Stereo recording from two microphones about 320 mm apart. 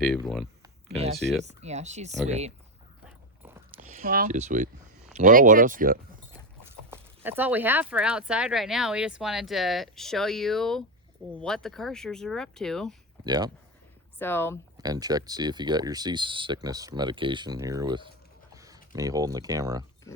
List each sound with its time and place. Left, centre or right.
0.0 s speech: centre
0.9 s speech: centre
1.2 s speech: centre
1.5 s speech: right
3.8 s speech: right
6.9 s speech: centre
13.2 s speech: centre
14.2 s speech: centre
14.8 s speech: centre